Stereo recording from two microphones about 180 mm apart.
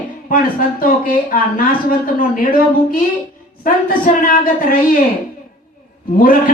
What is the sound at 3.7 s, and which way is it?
Speech, 50° left (ahead or behind).